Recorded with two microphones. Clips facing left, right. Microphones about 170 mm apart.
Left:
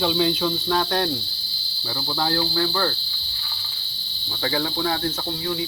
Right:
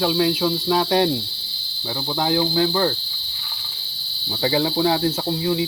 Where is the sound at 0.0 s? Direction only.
5° right (ahead or behind).